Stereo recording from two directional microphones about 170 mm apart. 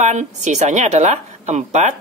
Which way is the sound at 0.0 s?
45° right (ahead or behind).